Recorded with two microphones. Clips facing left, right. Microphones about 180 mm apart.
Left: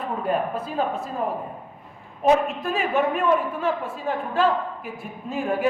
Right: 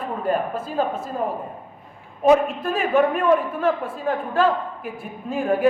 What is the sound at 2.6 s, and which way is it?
A woman's voice, 50° right (ahead or behind).